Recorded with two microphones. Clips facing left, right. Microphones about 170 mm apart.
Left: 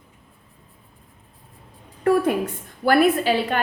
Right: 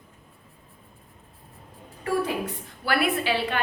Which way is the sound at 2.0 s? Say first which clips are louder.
Left 8 dB; 55° left (ahead or behind).